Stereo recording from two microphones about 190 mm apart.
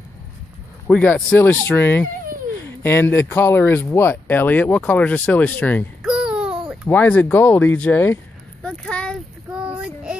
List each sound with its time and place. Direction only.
0.8 s speech: 10° left (ahead or behind)
6.0 s babbling: 5° right (ahead or behind)
6.9 s speech: 10° left (ahead or behind)
8.6 s a sound: 5° left (ahead or behind)